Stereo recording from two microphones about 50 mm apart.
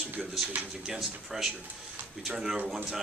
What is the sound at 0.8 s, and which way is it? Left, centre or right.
Speech, centre.